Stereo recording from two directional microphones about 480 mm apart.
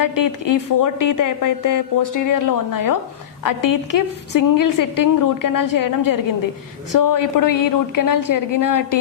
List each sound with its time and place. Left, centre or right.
0.0 s speech: left